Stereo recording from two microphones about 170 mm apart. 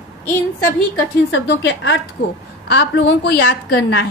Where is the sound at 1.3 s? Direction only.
90° left.